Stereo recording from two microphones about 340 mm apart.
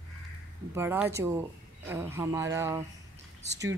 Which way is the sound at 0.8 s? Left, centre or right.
Centre.